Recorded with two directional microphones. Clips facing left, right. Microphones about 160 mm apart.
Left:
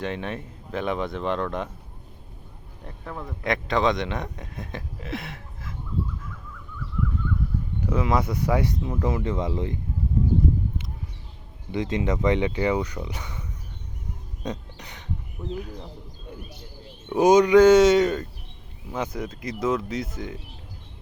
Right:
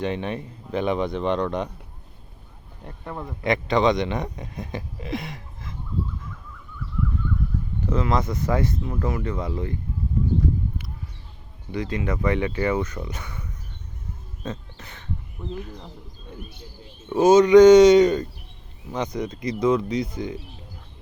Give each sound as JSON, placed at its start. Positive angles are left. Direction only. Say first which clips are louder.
{"t": 0.0, "sound": "a man's voice", "louder": "right 3 dB", "side_deg": 0}
{"t": 2.8, "sound": "a man's voice", "louder": "right 2 dB", "side_deg": -5}
{"t": 7.8, "sound": "speech", "louder": "even", "side_deg": 10}
{"t": 11.7, "sound": "speech", "louder": "left 1 dB", "side_deg": 20}
{"t": 14.4, "sound": "music", "louder": "left 1 dB", "side_deg": 15}
{"t": 15.5, "sound": "speech", "louder": "left 1 dB", "side_deg": 10}
{"t": 17.1, "sound": "a man's voice", "louder": "right 2 dB", "side_deg": 10}